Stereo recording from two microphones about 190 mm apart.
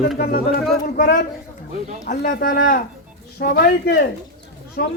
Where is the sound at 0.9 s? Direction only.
45° left (ahead or behind).